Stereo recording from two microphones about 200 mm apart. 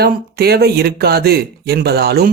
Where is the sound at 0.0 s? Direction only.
50° right (ahead or behind).